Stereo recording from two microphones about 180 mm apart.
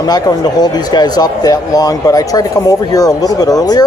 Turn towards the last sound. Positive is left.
turn(degrees=20)  # may be behind; listen again after turning